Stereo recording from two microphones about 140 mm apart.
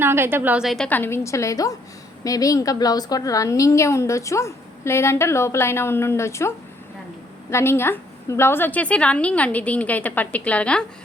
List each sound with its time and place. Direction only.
0.0 s a woman's voice: 15° right (ahead or behind); by 0.9 s centre (ahead or behind)
0.9 s a woman's voice: 15° left (ahead or behind)
7.5 s a woman's voice: 15° left (ahead or behind)